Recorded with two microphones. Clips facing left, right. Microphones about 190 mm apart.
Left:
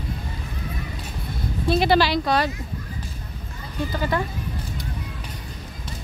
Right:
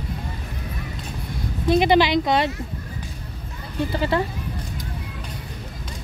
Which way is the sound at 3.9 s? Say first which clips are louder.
Right 2 dB; 25° right (ahead or behind).